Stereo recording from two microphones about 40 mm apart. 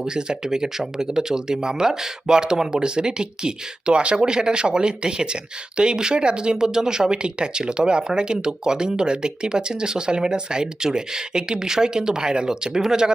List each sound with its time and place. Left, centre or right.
0.0 s speech: right